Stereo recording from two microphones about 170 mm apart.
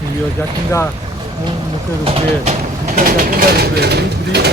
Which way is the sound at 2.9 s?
55° right (ahead or behind).